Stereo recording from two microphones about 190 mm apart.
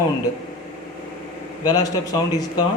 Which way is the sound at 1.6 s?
20° left (ahead or behind).